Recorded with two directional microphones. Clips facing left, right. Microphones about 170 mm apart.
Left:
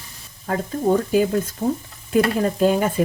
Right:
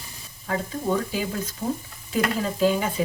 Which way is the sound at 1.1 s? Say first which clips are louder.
Left 10 dB; 50° left (ahead or behind).